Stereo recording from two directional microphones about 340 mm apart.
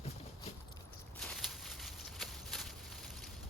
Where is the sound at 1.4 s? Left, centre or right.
Centre.